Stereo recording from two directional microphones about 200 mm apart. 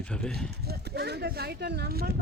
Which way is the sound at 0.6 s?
55° right (ahead or behind).